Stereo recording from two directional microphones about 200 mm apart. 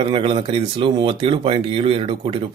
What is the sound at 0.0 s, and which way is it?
Speech, 25° right (ahead or behind).